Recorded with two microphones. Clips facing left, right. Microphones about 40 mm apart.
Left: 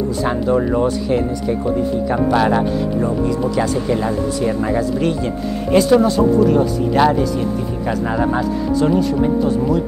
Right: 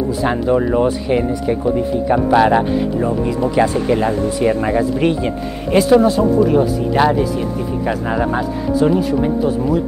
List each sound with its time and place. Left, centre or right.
0.2 s speech: centre
5.8 s speech: centre